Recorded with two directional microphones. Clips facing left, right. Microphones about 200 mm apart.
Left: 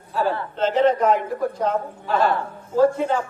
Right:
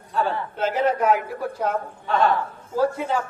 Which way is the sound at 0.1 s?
5° left (ahead or behind).